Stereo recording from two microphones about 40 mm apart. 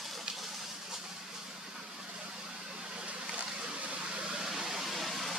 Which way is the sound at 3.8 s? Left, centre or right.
Right.